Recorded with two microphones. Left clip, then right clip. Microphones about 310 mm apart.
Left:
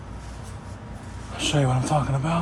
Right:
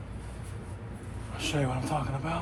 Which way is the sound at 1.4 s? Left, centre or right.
Left.